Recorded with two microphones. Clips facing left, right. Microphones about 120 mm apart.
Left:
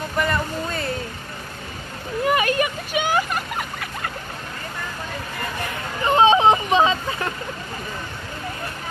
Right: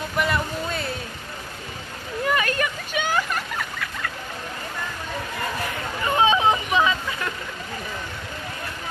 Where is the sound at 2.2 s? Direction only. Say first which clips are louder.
Left 4 dB; 15° left (ahead or behind).